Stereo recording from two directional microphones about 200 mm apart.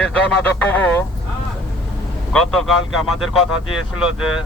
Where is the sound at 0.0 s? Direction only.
5° left (ahead or behind).